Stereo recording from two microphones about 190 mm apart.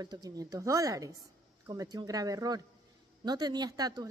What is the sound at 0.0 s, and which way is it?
A woman's voice, 20° right (ahead or behind).